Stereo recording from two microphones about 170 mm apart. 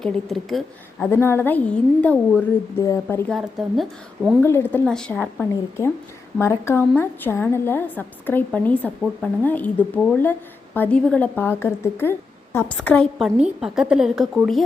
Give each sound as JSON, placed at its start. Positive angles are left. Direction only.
{"t": 0.0, "sound": "a woman's voice", "side_deg": 0}
{"t": 3.2, "sound": "a woman's voice", "side_deg": 0}
{"t": 4.4, "sound": "a woman's voice", "side_deg": 15}